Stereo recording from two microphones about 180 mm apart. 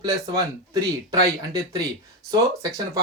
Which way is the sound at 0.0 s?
20° right (ahead or behind).